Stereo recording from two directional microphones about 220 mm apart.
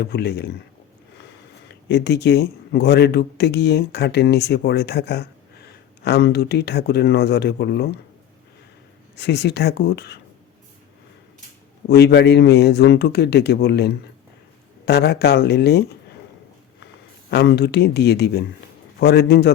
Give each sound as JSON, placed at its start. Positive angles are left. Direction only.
{"t": 0.0, "sound": "a man's voice", "side_deg": 50}
{"t": 1.6, "sound": "a man's voice", "side_deg": 50}
{"t": 9.1, "sound": "a man's voice", "side_deg": 50}
{"t": 11.9, "sound": "a man's voice", "side_deg": 50}
{"t": 17.3, "sound": "a man's voice", "side_deg": 50}